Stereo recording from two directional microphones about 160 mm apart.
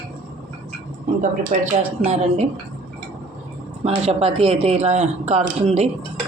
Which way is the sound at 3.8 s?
40° right (ahead or behind).